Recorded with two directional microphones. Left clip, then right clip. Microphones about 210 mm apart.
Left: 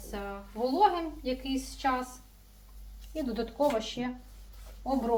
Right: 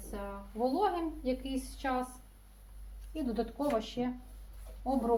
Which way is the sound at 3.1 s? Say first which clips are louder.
Left 2 dB; 15° left (ahead or behind).